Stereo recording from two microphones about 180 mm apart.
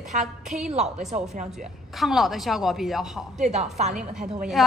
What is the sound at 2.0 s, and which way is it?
A woman's voice, centre (ahead or behind).